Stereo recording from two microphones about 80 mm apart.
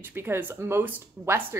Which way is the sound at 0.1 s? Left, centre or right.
Right.